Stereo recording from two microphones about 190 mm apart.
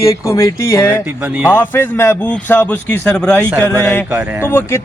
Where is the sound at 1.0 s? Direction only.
10° right (ahead or behind).